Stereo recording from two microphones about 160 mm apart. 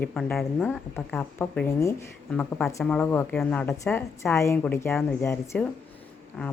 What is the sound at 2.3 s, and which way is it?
Speech, 5° left (ahead or behind).